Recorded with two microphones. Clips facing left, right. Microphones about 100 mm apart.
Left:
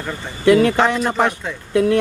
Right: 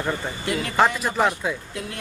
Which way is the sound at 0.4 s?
60° left (ahead or behind).